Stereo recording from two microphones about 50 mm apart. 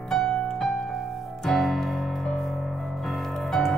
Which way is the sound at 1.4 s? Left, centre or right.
Centre.